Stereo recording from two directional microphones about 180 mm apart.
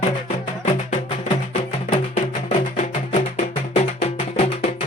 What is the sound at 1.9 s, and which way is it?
Music, 40° left (ahead or behind).